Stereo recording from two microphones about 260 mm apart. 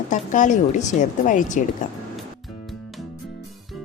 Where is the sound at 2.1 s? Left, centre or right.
Centre.